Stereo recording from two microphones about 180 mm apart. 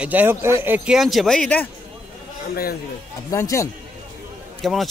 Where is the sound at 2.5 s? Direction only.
55° left (ahead or behind).